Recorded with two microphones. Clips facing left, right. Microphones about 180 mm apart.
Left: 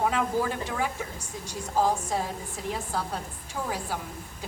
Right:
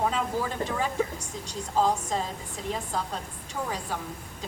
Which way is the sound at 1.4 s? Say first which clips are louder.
Even; 10° left (ahead or behind).